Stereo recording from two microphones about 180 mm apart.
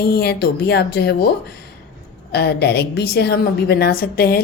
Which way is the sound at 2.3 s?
65° left (ahead or behind).